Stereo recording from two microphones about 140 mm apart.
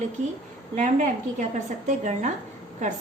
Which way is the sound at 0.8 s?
65° right (ahead or behind).